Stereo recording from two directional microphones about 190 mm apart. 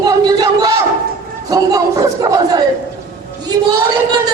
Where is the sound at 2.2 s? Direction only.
20° right (ahead or behind).